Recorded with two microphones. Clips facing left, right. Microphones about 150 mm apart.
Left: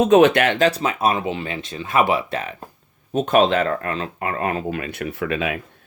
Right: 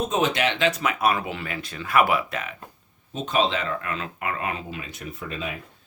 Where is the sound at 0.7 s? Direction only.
30° left (ahead or behind).